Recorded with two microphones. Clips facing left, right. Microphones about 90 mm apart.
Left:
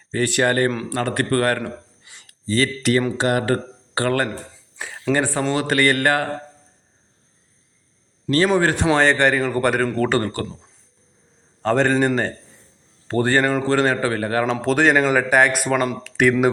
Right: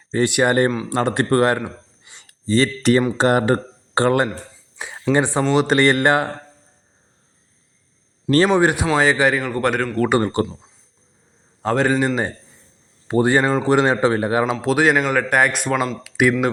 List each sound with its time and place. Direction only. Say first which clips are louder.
0.1 s speech: right 2 dB; 20° right (ahead or behind)
4.8 s a sound: right 2 dB; 20° right (ahead or behind)
5.5 s speech: right 4 dB; 20° right (ahead or behind)
8.5 s speech: right 1 dB; 15° right (ahead or behind); by 9.8 s centre (ahead or behind)
10.1 s speech: right 3 dB; 20° right (ahead or behind)
11.6 s speech: left 1 dB; 5° right (ahead or behind)
14.6 s speech: left 2 dB; 5° right (ahead or behind)